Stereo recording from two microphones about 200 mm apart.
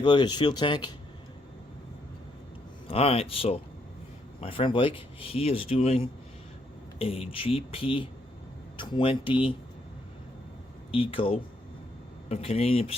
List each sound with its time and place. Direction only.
0.0 s speech: 20° left (ahead or behind)
2.8 s speech: 30° left (ahead or behind)
10.9 s speech: 25° left (ahead or behind)